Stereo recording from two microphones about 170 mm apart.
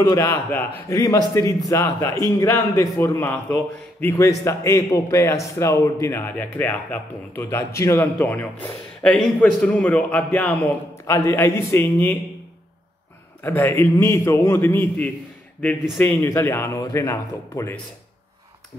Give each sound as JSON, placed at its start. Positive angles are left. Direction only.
{"t": 0.0, "sound": "a man's voice", "side_deg": 20}
{"t": 11.1, "sound": "speech", "side_deg": 20}
{"t": 13.4, "sound": "speech", "side_deg": 10}